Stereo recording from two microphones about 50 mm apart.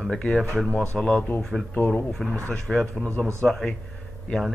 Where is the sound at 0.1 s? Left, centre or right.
Centre.